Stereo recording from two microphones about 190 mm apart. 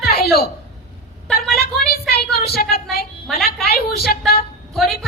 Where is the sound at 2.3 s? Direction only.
55° left (ahead or behind).